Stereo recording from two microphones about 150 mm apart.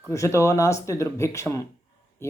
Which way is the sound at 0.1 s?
20° left (ahead or behind).